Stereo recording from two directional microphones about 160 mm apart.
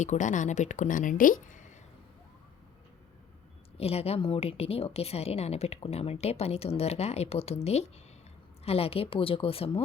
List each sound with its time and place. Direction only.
0.0 s speech: 50° left (ahead or behind)
3.8 s a woman's voice: 40° left (ahead or behind)